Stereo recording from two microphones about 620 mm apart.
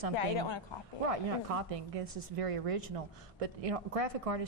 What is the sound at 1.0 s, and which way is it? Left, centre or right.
Speech, right.